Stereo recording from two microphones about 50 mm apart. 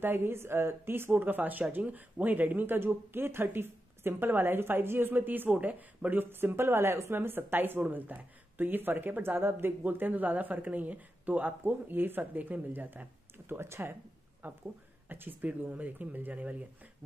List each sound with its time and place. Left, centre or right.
0.0 s speech: right
1.1 s speech: right
7.2 s speech: right
9.4 s speech: right
13.6 s speech: right
14.4 s speech: right